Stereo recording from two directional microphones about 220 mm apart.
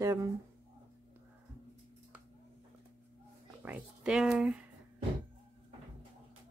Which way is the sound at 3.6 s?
5° right (ahead or behind).